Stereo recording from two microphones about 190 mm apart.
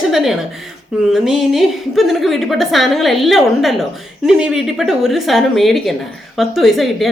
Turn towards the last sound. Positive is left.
turn(degrees=0)  # may be behind; listen again after turning